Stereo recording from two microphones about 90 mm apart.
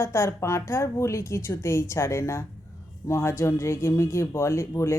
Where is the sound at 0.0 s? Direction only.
30° left (ahead or behind).